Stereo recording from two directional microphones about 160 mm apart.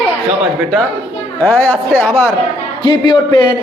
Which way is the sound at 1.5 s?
10° left (ahead or behind).